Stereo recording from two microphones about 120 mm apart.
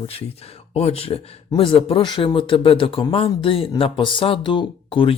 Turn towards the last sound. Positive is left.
turn(degrees=45)  # may be behind; listen again after turning